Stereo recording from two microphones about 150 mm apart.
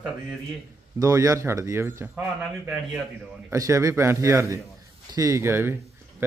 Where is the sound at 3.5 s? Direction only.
20° right (ahead or behind).